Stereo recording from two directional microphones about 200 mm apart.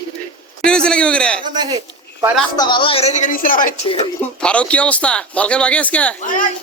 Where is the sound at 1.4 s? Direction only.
20° right (ahead or behind).